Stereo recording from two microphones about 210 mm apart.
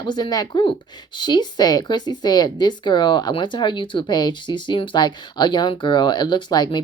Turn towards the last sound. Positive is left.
turn(degrees=20)  # may be behind; listen again after turning